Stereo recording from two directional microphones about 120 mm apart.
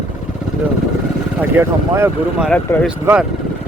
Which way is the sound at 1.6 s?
20° right (ahead or behind).